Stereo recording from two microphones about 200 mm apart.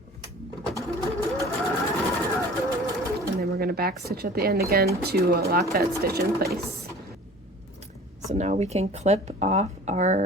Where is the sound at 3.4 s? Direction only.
50° right (ahead or behind).